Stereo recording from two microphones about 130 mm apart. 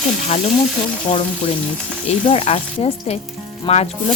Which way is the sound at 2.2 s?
50° left (ahead or behind).